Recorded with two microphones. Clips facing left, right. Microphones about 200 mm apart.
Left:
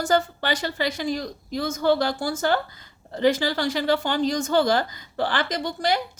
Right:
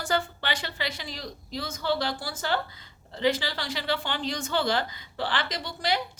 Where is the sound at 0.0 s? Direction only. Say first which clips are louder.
Left 6 dB; 40° left (ahead or behind).